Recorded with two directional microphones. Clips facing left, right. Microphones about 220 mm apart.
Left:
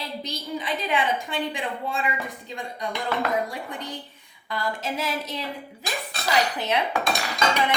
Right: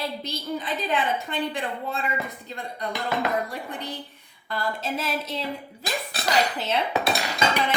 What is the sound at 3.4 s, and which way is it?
A woman's voice, 15° left (ahead or behind).